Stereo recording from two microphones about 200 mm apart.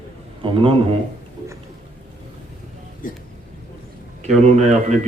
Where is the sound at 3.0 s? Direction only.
45° left (ahead or behind).